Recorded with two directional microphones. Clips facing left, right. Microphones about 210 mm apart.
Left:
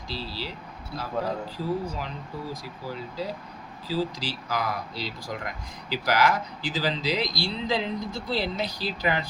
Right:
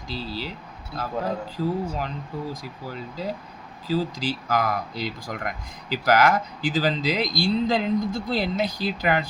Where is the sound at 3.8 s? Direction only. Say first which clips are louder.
Right 4 dB; 50° right (ahead or behind).